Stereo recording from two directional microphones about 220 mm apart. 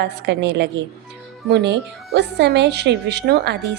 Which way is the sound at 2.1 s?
50° right (ahead or behind).